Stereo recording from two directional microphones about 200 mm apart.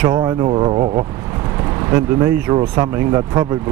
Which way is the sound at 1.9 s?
10° right (ahead or behind).